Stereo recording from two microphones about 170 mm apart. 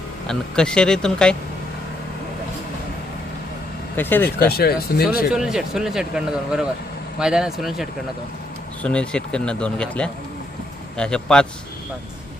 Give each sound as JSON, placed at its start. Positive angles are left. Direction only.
{"t": 0.3, "sound": "speech", "side_deg": 5}
{"t": 3.9, "sound": "speech", "side_deg": 10}
{"t": 4.4, "sound": "speech", "side_deg": 65}
{"t": 5.3, "sound": "speech", "side_deg": -5}